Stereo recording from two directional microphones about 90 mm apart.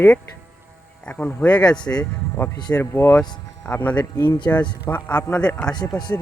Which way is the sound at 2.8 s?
30° left (ahead or behind).